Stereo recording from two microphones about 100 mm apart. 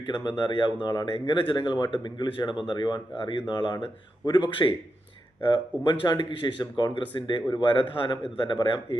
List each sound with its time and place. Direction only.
0.1 s speech: 50° left (ahead or behind)
5.8 s speech: 50° left (ahead or behind)